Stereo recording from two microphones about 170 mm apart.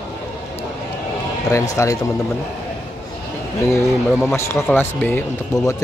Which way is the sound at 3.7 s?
15° left (ahead or behind).